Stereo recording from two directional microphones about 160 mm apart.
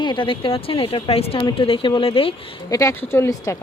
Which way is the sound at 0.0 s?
30° left (ahead or behind).